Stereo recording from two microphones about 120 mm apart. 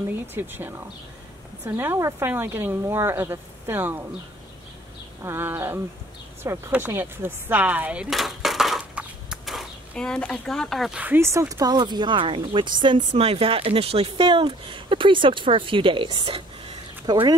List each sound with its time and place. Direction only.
0.3 s speech: 20° right (ahead or behind)
5.2 s speech: 20° right (ahead or behind); by 11.0 s centre (ahead or behind)
11.0 s speech: 20° right (ahead or behind); by 13.0 s 40° right (ahead or behind)
13.1 s speech: 55° right (ahead or behind); by 17.4 s 35° right (ahead or behind)